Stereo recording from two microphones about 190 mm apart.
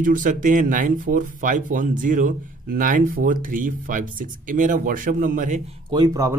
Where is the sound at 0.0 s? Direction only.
45° right (ahead or behind).